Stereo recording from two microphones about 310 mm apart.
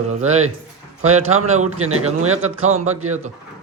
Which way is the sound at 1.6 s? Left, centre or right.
Right.